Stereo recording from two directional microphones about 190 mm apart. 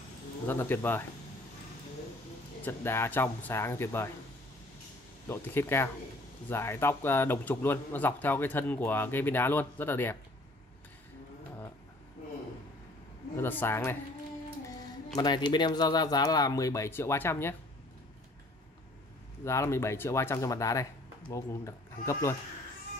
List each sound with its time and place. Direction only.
0.5 s speech: 10° left (ahead or behind)
2.6 s speech: 10° left (ahead or behind)
5.3 s speech: 10° left (ahead or behind)
13.4 s speech: 10° left (ahead or behind)
15.1 s speech: 25° left (ahead or behind)
19.4 s speech: 15° left (ahead or behind)